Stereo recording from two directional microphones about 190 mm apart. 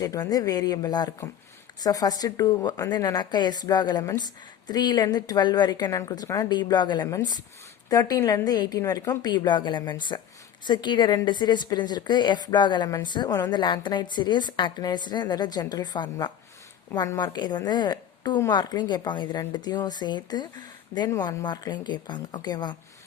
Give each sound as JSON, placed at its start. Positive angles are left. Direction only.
{"t": 0.0, "sound": "a woman's voice", "side_deg": 20}